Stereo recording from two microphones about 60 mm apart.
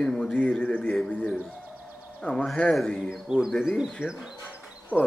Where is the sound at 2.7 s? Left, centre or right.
Centre.